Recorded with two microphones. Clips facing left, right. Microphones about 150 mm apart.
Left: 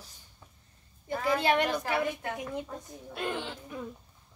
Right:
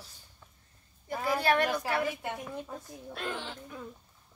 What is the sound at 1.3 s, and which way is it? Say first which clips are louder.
Speech: left 1 dB; 20° left (ahead or behind).